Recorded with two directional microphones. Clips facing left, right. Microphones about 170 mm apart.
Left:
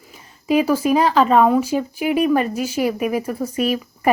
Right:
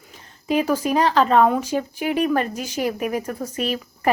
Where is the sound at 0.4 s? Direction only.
10° left (ahead or behind).